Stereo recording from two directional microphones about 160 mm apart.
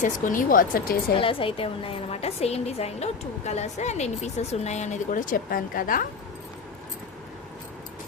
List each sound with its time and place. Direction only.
0.0 s speech: 55° left (ahead or behind)
1.2 s a woman's voice: 35° left (ahead or behind); by 6.1 s 60° left (ahead or behind)